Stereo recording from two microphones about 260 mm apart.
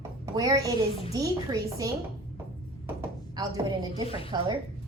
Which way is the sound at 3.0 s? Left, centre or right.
Centre.